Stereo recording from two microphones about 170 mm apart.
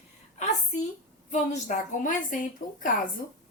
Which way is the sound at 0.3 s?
40° left (ahead or behind).